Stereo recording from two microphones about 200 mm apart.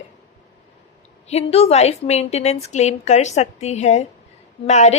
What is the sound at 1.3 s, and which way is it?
A woman's voice, 30° left (ahead or behind).